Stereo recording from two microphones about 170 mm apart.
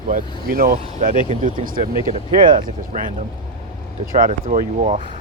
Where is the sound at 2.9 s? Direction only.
45° right (ahead or behind).